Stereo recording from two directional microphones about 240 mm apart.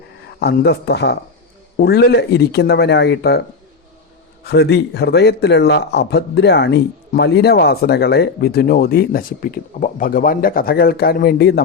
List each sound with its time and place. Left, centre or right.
0.3 s speech: left
4.4 s speech: left